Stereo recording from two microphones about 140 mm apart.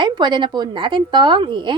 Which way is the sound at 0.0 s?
35° right (ahead or behind).